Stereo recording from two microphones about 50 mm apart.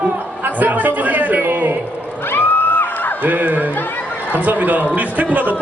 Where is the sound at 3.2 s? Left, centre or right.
Right.